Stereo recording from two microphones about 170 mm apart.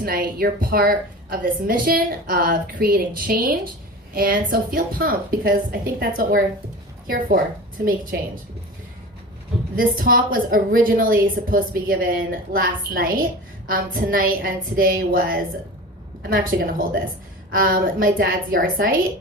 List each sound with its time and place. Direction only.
0.0 s a woman's voice: 60° right (ahead or behind)
9.7 s a woman's voice: 55° right (ahead or behind)